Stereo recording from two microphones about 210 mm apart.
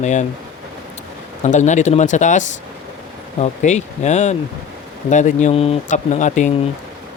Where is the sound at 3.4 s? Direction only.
35° left (ahead or behind).